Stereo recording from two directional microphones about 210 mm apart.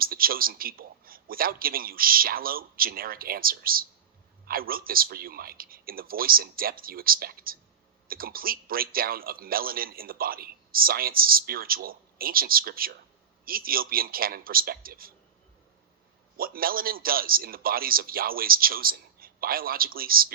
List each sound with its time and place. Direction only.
0.0 s a man's voice: 45° right (ahead or behind)
16.4 s a man's voice: 45° right (ahead or behind)